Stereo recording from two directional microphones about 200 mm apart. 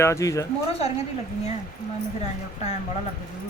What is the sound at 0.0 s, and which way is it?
Speech, 15° left (ahead or behind).